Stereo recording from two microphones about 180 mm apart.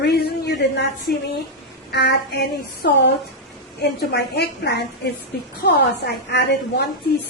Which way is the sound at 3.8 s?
65° left (ahead or behind).